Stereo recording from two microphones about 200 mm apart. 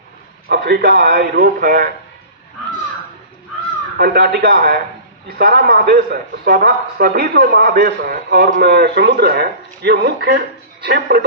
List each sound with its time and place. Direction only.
0.4 s a man's voice: 50° right (ahead or behind)
3.9 s a man's voice: 50° right (ahead or behind)